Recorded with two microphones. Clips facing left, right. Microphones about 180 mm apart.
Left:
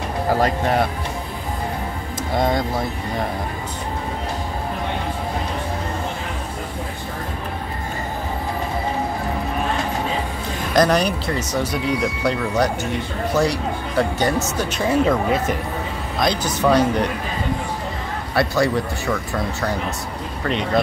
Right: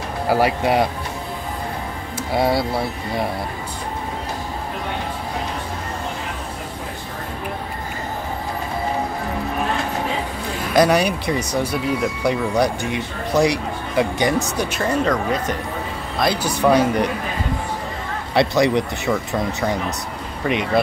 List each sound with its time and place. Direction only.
0.3 s speech: 10° right (ahead or behind)
2.3 s speech: 10° right (ahead or behind)
10.7 s speech: 10° right (ahead or behind)
14.8 s speech: 5° left (ahead or behind)
16.2 s speech: 10° right (ahead or behind)
18.3 s speech: 20° right (ahead or behind)
20.4 s speech: 10° right (ahead or behind)